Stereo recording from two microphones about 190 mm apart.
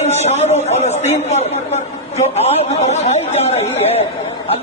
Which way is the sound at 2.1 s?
35° left (ahead or behind).